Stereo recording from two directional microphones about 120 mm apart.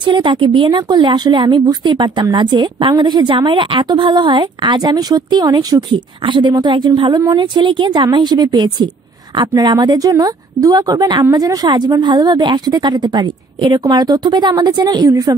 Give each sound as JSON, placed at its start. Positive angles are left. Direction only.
{"t": 0.0, "sound": "a woman's voice", "side_deg": -40}